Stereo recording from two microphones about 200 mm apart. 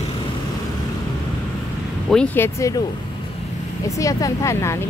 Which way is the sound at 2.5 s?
15° left (ahead or behind).